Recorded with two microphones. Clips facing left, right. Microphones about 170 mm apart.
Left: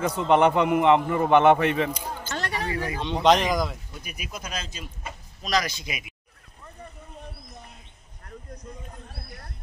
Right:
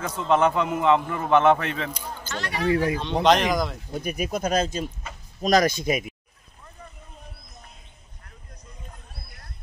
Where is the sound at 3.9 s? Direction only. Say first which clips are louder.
Right 11 dB; 50° right (ahead or behind).